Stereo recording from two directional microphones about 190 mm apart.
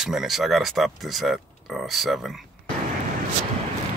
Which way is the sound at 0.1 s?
Centre (ahead or behind).